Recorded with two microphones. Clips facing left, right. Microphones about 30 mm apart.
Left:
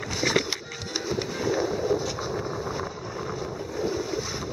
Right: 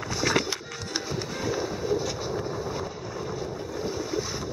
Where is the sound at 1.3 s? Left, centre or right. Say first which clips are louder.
Left 3 dB; centre.